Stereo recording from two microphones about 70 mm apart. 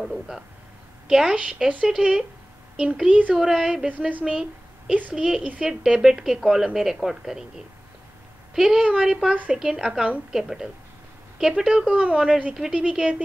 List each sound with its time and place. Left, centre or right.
0.0 s a sound: centre
1.0 s a woman's voice: centre
3.3 s a woman's voice: centre